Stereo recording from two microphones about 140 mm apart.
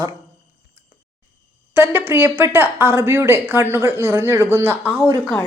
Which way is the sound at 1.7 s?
15° right (ahead or behind).